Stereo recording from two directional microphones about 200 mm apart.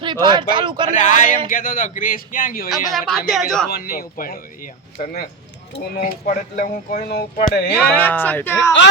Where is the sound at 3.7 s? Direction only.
50° left (ahead or behind).